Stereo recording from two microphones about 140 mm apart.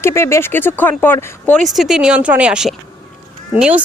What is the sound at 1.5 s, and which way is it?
Speech, centre (ahead or behind).